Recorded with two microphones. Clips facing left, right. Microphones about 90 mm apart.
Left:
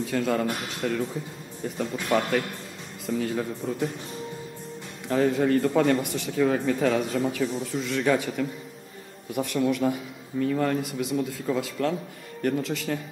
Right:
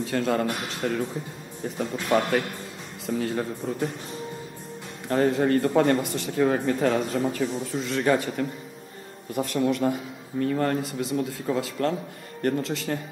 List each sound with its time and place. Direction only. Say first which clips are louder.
0.0 s speech: right 1 dB; centre (ahead or behind)
2.1 s speech: right 2 dB; centre (ahead or behind)
6.3 s speech: right 1 dB; 20° right (ahead or behind)
6.6 s speech: even; 5° right (ahead or behind)
7.7 s speech: right 1 dB; 15° right (ahead or behind)
8.1 s speech: right 1 dB; centre (ahead or behind)